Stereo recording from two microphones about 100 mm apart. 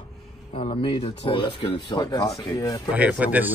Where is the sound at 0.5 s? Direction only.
90° left; by 2.8 s 35° left (ahead or behind).